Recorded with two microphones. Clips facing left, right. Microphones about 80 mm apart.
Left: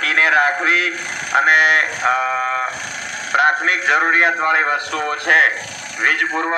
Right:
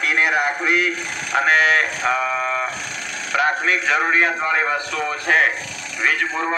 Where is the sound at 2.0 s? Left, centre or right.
Left.